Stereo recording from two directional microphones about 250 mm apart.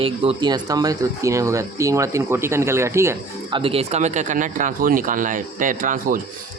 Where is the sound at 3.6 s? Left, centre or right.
Right.